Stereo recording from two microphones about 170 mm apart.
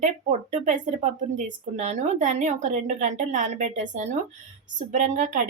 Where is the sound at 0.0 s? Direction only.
45° right (ahead or behind).